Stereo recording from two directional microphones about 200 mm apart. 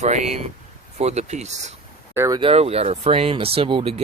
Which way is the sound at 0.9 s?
35° right (ahead or behind).